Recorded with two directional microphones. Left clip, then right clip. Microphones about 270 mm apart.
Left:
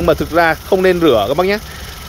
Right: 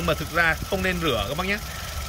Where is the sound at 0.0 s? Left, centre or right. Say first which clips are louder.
Left 10 dB; centre.